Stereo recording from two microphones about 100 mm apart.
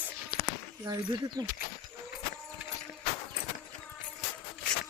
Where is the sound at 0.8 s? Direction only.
40° right (ahead or behind).